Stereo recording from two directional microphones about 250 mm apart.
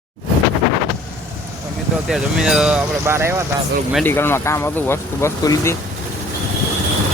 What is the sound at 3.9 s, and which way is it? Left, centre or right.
Speech, centre.